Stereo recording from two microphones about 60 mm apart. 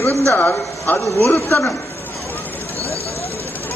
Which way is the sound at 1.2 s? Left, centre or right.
Left.